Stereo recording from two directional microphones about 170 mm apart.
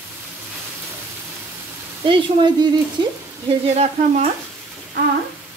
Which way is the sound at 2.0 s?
30° right (ahead or behind).